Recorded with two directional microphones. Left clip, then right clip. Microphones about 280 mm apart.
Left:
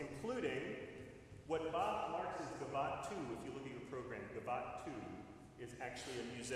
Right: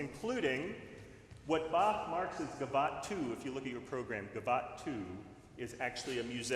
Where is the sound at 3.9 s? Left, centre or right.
Right.